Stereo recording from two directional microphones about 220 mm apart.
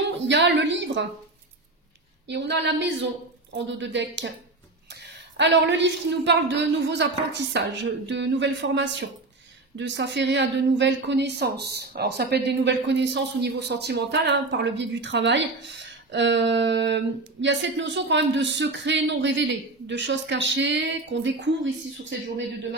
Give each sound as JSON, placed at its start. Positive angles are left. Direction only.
{"t": 0.3, "sound": "a woman's voice", "side_deg": -55}
{"t": 2.2, "sound": "a woman's voice", "side_deg": -50}